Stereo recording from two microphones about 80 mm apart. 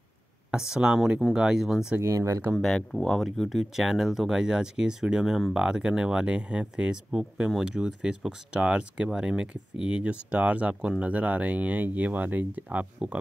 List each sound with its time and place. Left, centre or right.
0.5 s speech: centre
2.0 s speech: right
2.5 s speech: centre